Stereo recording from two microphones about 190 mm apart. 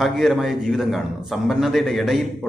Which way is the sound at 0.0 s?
Centre (ahead or behind).